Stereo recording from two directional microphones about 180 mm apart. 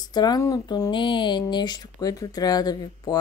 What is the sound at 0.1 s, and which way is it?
Speech, 20° left (ahead or behind).